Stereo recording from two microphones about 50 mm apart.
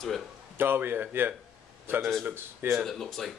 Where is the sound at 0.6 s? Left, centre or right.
Right.